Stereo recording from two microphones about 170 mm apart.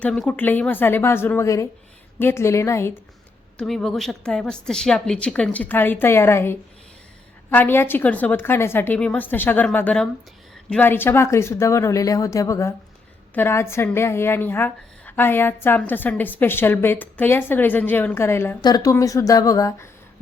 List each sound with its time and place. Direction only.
0.0 s a woman's voice: 5° left (ahead or behind)
3.6 s a woman's voice: 5° left (ahead or behind); by 19.9 s 20° left (ahead or behind)